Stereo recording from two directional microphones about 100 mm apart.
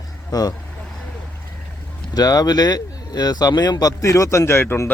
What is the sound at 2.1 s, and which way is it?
Speech, 40° left (ahead or behind).